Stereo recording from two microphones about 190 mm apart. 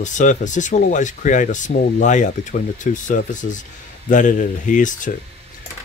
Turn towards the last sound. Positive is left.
turn(degrees=40)  # may be behind; listen again after turning